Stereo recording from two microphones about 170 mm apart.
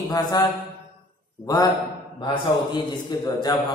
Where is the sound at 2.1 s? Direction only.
25° left (ahead or behind).